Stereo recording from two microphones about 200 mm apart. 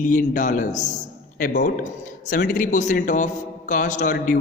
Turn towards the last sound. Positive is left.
turn(degrees=40)  # may be behind; listen again after turning